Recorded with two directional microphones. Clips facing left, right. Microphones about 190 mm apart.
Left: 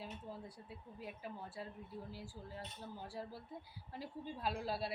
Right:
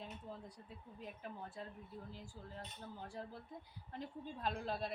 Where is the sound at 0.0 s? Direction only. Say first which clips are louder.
Left 1 dB; 5° left (ahead or behind).